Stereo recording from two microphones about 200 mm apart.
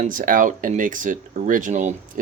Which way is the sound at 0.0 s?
45° right (ahead or behind).